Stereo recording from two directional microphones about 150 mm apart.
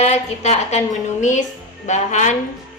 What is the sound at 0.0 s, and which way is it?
A woman's voice, 45° left (ahead or behind).